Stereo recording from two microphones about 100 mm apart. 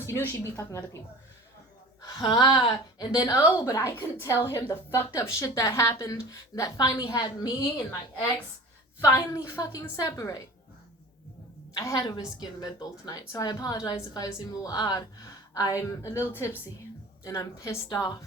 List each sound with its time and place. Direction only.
0.0 s a woman's voice: 30° left (ahead or behind)
2.0 s speech: 45° left (ahead or behind)
3.2 s a woman's voice: 35° left (ahead or behind)
9.0 s a woman's voice: 30° left (ahead or behind)
11.7 s a woman's voice: 35° left (ahead or behind)